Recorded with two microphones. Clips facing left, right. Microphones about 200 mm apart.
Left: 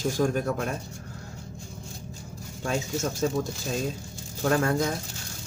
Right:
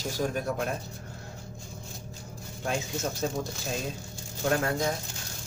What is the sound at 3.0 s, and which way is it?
Speech, 45° left (ahead or behind).